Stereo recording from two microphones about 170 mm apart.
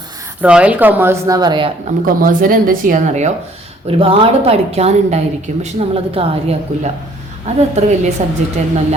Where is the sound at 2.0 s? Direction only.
55° right (ahead or behind).